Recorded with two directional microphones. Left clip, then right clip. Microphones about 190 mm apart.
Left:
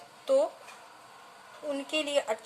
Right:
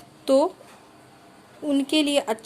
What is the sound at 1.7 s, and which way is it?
Speech, 50° right (ahead or behind).